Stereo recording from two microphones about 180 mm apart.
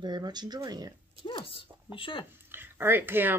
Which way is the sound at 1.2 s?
30° left (ahead or behind).